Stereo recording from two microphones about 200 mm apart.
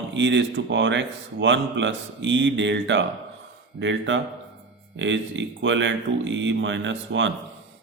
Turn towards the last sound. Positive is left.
turn(degrees=-65)  # may be behind; listen again after turning